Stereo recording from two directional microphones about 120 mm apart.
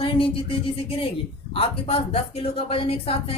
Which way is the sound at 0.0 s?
50° left (ahead or behind).